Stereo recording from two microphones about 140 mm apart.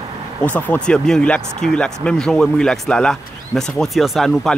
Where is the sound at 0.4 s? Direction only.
10° left (ahead or behind).